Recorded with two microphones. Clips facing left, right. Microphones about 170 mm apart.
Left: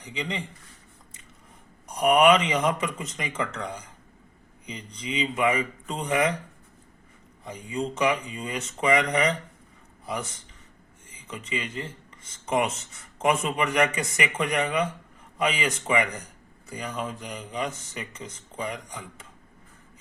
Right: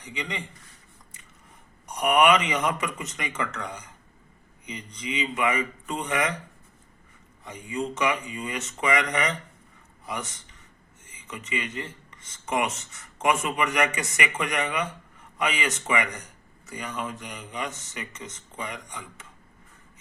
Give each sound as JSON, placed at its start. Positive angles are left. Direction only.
{"t": 0.0, "sound": "speech", "side_deg": 30}
{"t": 1.9, "sound": "speech", "side_deg": 30}
{"t": 7.4, "sound": "speech", "side_deg": 30}
{"t": 11.3, "sound": "speech", "side_deg": 30}